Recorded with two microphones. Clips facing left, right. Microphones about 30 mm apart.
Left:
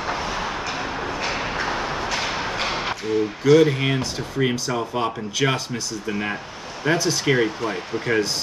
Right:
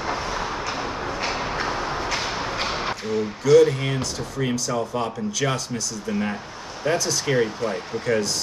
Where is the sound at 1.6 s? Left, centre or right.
Centre.